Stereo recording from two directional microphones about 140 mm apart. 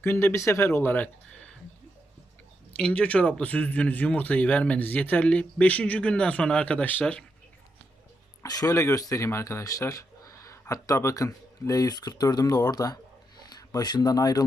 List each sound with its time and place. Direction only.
0.0 s speech: 15° left (ahead or behind)
2.7 s speech: 10° left (ahead or behind)
8.4 s speech: 25° left (ahead or behind)